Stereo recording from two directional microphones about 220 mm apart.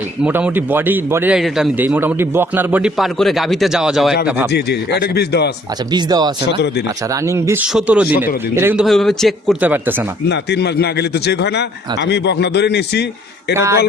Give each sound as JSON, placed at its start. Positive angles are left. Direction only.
{"t": 0.3, "sound": "a man's voice", "side_deg": -10}
{"t": 4.5, "sound": "a man's voice", "side_deg": 50}
{"t": 5.9, "sound": "speech", "side_deg": -20}
{"t": 6.5, "sound": "a man's voice", "side_deg": 50}
{"t": 7.1, "sound": "a man's voice", "side_deg": -15}
{"t": 10.2, "sound": "a man's voice", "side_deg": 50}
{"t": 13.5, "sound": "a man's voice", "side_deg": -10}